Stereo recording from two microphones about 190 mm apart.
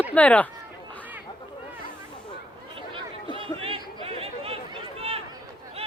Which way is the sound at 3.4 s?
30° right (ahead or behind).